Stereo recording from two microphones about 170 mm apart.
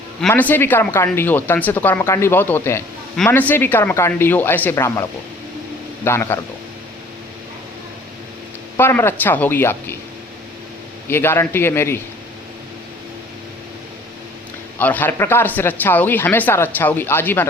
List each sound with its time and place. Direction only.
0.2 s speech: 10° left (ahead or behind)
6.1 s speech: 15° left (ahead or behind)
8.8 s speech: 15° left (ahead or behind)
11.1 s speech: 15° left (ahead or behind)
14.8 s speech: 10° left (ahead or behind)